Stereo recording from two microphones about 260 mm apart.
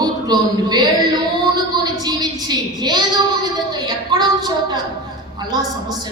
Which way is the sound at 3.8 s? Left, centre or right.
Centre.